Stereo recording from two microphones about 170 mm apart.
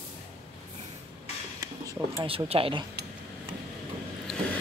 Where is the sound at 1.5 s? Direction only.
20° right (ahead or behind).